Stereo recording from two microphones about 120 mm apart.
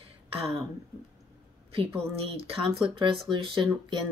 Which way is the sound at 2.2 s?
50° right (ahead or behind).